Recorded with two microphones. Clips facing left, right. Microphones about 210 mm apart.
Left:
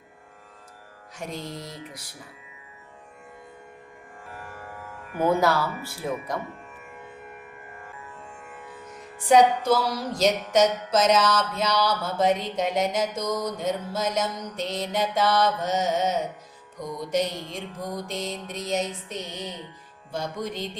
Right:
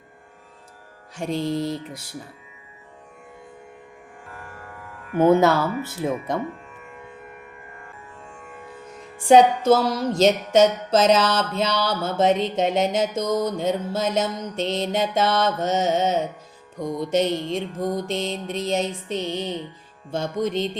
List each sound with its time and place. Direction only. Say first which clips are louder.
1.1 s music: right 10 dB; 30° right (ahead or behind)
5.1 s music: right 6 dB; 25° right (ahead or behind)
9.1 s music: right 4 dB; 25° right (ahead or behind)